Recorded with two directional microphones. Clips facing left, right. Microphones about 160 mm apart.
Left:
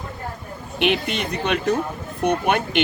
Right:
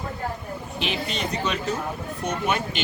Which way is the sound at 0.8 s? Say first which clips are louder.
Left 7 dB; 60° left (ahead or behind).